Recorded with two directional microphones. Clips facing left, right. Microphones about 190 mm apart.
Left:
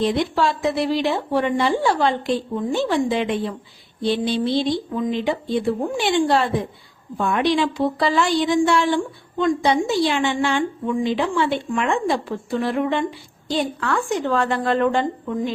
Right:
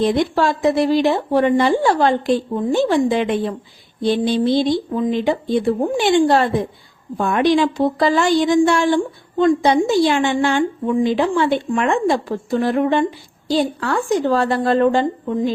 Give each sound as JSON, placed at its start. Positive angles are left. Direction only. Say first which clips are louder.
{"t": 0.0, "sound": "a woman's voice", "louder": "right 3 dB", "side_deg": -45}